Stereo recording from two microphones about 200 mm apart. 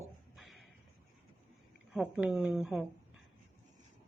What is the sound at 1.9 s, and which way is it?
Speech, 5° right (ahead or behind).